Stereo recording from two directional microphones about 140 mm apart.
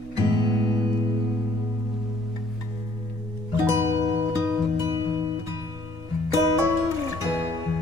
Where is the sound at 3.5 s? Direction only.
20° right (ahead or behind).